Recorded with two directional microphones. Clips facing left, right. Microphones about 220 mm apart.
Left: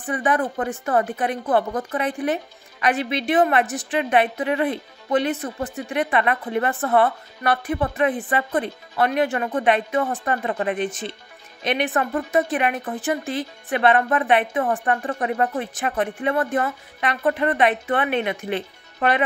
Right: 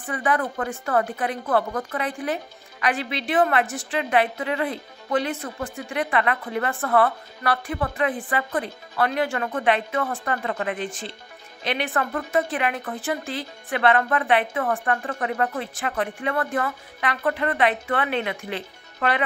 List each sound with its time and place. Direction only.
0.0 s a woman's voice: 20° left (ahead or behind)